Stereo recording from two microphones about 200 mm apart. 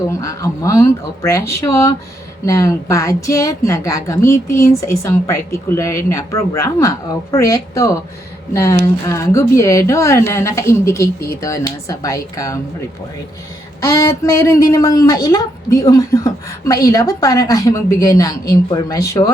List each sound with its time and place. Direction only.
0.1 s speech: 15° left (ahead or behind)
13.8 s speech: 15° left (ahead or behind)